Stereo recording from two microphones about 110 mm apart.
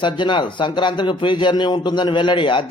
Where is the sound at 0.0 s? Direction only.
45° left (ahead or behind).